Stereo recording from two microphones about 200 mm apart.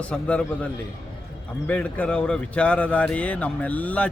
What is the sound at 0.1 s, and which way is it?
A man's voice, 5° left (ahead or behind).